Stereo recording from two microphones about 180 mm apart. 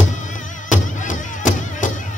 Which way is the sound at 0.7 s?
45° left (ahead or behind).